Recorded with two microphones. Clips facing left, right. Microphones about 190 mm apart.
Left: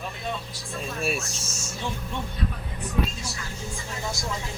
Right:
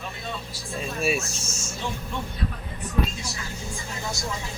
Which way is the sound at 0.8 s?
Centre (ahead or behind).